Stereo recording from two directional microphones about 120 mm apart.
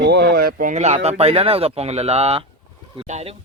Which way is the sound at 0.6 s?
70° right (ahead or behind).